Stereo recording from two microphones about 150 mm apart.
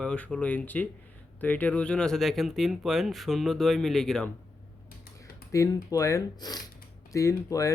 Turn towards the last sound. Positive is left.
turn(degrees=20)  # may be behind; listen again after turning